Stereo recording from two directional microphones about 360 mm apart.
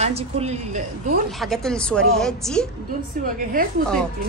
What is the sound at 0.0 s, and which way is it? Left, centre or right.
Speech, centre.